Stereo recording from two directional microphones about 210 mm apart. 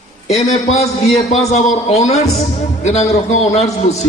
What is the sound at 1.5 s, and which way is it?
A man's voice, 30° left (ahead or behind).